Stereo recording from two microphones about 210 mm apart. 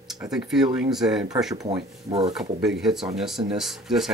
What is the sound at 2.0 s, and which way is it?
Speech, 30° right (ahead or behind).